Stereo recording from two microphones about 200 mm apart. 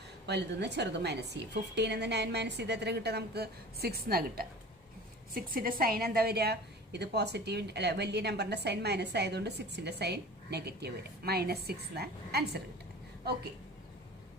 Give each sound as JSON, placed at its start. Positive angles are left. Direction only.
{"t": 0.3, "sound": "a woman's voice", "side_deg": -60}